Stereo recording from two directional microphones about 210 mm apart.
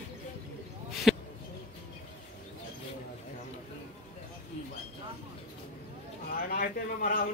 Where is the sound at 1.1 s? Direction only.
Centre (ahead or behind).